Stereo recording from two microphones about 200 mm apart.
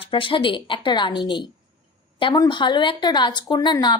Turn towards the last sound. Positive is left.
turn(degrees=20)  # may be behind; listen again after turning